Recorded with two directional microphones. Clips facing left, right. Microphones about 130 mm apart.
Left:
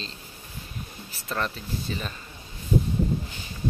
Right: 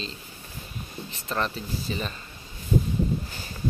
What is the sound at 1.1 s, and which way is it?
Speech, centre (ahead or behind).